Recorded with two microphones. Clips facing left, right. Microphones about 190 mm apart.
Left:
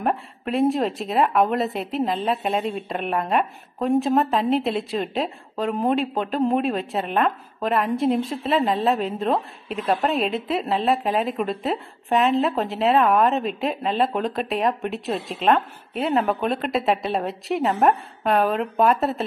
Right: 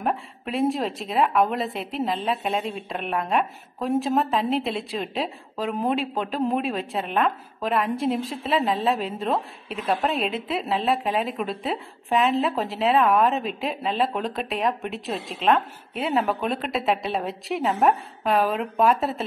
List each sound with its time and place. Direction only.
0.0 s speech: centre (ahead or behind)